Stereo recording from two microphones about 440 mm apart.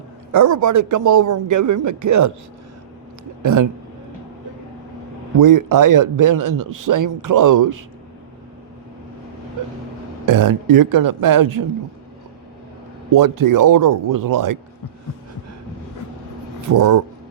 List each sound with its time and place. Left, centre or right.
0.3 s a man's voice: right
3.4 s a man's voice: right
5.4 s a man's voice: right
10.2 s a man's voice: right
13.1 s a man's voice: right
16.6 s speech: right